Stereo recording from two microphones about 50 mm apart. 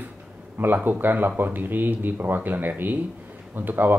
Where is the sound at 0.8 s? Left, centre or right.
Right.